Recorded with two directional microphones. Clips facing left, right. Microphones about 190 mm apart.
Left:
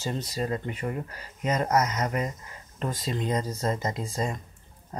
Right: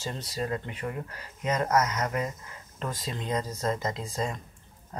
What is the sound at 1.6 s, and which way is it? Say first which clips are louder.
Speech: even; 20° left (ahead or behind).